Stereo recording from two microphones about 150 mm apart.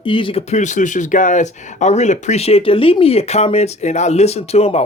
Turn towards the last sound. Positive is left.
turn(degrees=45)  # may be behind; listen again after turning